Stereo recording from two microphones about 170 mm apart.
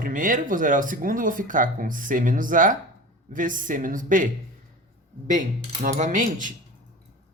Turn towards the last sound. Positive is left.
turn(degrees=-50)  # may be behind; listen again after turning